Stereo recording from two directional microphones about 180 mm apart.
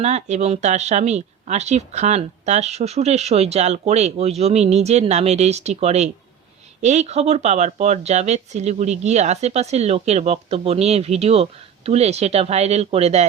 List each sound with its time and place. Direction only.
0.0 s speech: 40° right (ahead or behind)